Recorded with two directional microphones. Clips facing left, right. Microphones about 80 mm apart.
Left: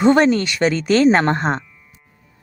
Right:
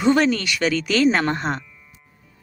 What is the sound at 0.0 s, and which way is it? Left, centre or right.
A woman's voice, left.